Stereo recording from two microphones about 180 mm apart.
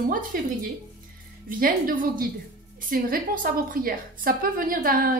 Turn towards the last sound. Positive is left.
turn(degrees=-55)  # may be behind; listen again after turning